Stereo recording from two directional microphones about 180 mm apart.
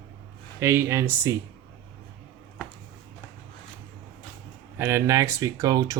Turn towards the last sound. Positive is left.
turn(degrees=-20)  # may be behind; listen again after turning